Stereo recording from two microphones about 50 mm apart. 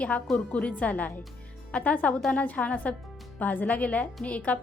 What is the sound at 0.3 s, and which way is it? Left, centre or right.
A woman's voice, left.